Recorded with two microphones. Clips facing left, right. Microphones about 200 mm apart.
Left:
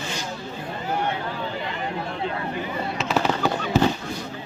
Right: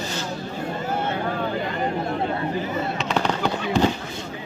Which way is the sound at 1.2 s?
50° right (ahead or behind).